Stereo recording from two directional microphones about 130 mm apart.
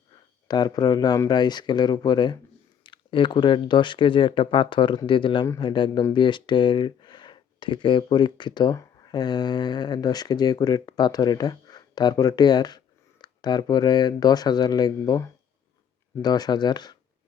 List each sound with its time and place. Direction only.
0.4 s speech: 30° left (ahead or behind)